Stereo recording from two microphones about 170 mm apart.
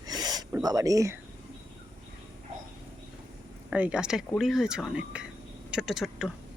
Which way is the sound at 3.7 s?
5° right (ahead or behind).